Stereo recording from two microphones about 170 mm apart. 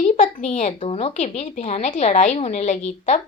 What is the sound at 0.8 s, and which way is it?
Speech, 35° left (ahead or behind).